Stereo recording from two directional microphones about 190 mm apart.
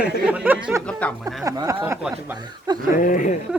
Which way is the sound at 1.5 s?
15° right (ahead or behind).